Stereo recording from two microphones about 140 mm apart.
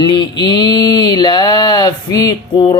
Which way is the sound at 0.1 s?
30° left (ahead or behind).